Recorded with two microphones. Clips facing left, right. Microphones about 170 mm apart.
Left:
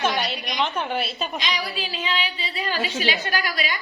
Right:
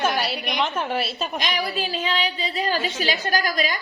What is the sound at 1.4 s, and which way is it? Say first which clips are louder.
A woman's voice: right 3 dB; 50° right (ahead or behind).